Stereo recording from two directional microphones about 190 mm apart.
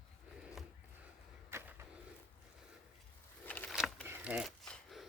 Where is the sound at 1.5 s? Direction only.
15° right (ahead or behind).